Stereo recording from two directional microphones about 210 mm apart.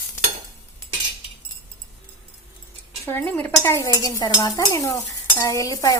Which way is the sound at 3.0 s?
10° left (ahead or behind).